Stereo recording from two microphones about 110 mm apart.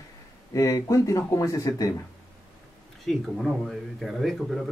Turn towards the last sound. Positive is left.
turn(degrees=0)  # may be behind; listen again after turning